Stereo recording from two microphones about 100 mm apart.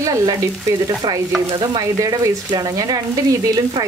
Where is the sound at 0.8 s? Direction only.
50° right (ahead or behind).